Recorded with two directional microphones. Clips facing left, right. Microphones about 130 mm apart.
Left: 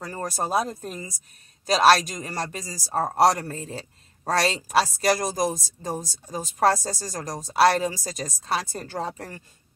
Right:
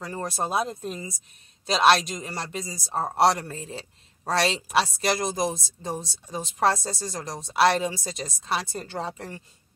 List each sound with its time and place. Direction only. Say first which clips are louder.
0.2 s speech: left 2 dB; 40° left (ahead or behind)